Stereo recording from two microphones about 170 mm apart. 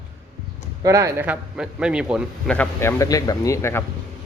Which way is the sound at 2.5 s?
10° left (ahead or behind).